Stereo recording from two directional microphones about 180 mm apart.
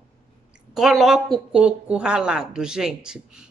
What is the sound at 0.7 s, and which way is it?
Speech, centre (ahead or behind).